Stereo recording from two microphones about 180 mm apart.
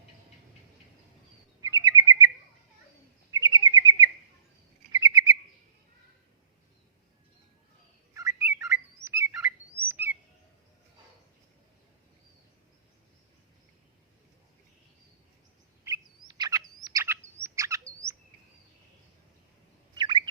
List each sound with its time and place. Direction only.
1.6 s bird: 20° right (ahead or behind)
3.3 s bird: 20° right (ahead or behind)
8.1 s bird: 15° right (ahead or behind)
9.7 s bird vocalization: 10° right (ahead or behind)
15.8 s chirp: 20° right (ahead or behind)
19.9 s bird: 25° right (ahead or behind)